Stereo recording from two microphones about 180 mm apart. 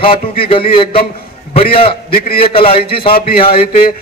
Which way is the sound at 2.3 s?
30° left (ahead or behind).